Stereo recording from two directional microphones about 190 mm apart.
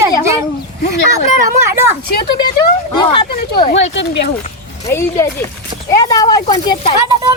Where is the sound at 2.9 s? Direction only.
25° left (ahead or behind).